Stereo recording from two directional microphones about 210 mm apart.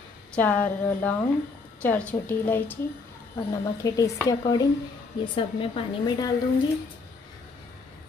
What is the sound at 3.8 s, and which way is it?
A woman's voice, 15° left (ahead or behind).